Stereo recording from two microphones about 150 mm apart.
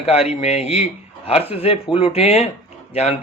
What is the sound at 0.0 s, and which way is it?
A man's voice, 40° left (ahead or behind).